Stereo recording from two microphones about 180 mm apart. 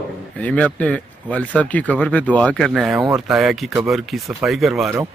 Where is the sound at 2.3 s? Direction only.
5° left (ahead or behind).